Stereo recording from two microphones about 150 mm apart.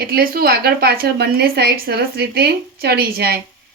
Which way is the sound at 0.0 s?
85° right.